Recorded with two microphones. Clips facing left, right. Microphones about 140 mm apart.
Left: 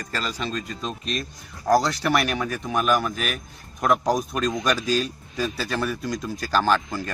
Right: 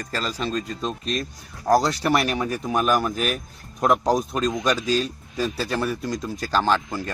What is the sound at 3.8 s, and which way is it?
Speech, 30° right (ahead or behind).